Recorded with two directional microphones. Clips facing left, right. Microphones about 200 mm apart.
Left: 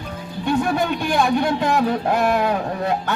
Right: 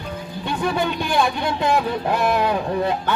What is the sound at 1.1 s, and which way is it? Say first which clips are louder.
Speech: left 4 dB; 50° left (ahead or behind).